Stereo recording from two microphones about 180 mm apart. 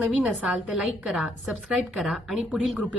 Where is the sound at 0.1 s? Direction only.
5° right (ahead or behind).